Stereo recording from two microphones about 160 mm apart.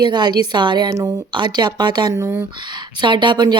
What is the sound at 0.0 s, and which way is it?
A woman's voice, 25° right (ahead or behind).